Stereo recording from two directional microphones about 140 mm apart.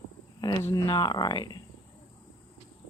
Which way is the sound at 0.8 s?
30° left (ahead or behind).